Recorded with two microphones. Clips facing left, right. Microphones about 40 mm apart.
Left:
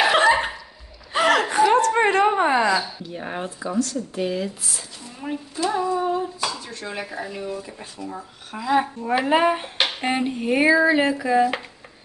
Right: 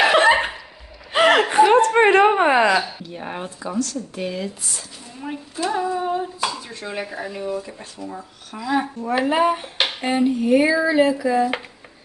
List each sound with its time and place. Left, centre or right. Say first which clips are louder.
0.2 s a sound: right 2 dB; right
1.1 s chuckle: right 4 dB; right
2.1 s whimper: right 4 dB; right
3.1 s speech: even; centre
3.6 s speech: left 1 dB; centre
5.6 s speech: even; centre
8.5 s speech: left 1 dB; centre
9.8 s a sound: right 1 dB; centre
10.0 s speech: right 7 dB; centre